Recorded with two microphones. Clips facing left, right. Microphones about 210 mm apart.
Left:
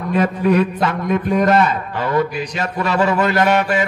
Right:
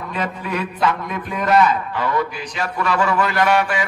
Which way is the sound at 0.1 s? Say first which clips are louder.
Left 10 dB; 45° left (ahead or behind).